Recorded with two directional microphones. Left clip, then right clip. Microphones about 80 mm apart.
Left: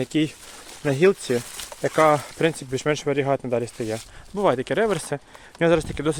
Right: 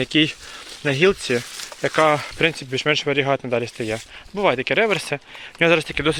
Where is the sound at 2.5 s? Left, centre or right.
Left.